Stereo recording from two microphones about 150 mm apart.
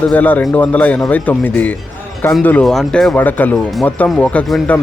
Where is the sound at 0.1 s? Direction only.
10° left (ahead or behind).